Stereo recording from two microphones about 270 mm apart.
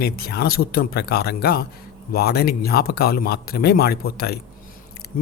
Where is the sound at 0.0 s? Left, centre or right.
Left.